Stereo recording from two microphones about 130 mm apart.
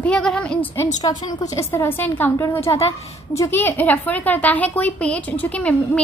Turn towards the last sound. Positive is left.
turn(degrees=10)  # may be behind; listen again after turning